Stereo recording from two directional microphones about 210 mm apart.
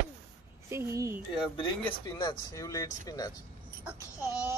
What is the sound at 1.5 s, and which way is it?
Speech, 20° left (ahead or behind).